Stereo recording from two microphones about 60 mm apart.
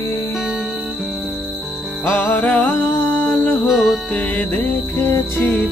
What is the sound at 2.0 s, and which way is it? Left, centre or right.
Music, left.